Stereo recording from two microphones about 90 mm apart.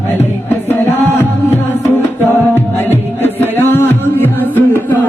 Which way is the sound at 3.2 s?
25° left (ahead or behind).